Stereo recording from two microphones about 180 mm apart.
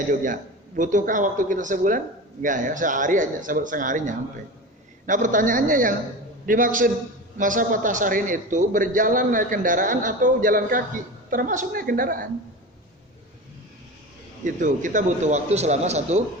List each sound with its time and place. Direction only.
0.8 s a man's voice: 45° right (ahead or behind)
14.4 s a man's voice: 45° right (ahead or behind)